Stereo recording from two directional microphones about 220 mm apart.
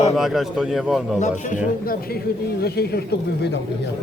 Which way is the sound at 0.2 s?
Centre (ahead or behind).